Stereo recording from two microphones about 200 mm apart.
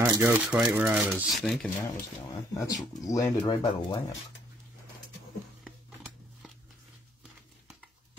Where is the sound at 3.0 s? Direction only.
15° left (ahead or behind).